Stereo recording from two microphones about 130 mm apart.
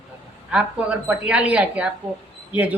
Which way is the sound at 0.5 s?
10° right (ahead or behind).